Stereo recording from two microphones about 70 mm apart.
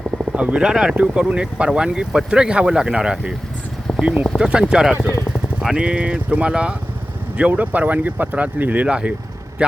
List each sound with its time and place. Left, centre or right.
0.3 s speech: centre